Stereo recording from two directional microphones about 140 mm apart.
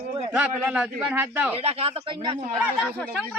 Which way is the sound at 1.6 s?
45° right (ahead or behind).